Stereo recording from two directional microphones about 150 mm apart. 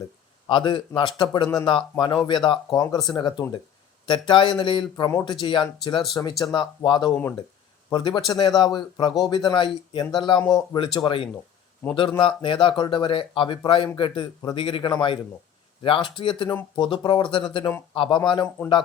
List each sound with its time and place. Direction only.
0.4 s speech: 35° left (ahead or behind)